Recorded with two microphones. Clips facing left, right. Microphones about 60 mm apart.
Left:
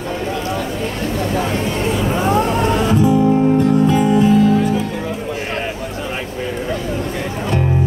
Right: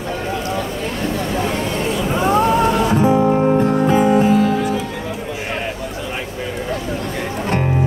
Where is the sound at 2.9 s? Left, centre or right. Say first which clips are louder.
Left 2 dB; right.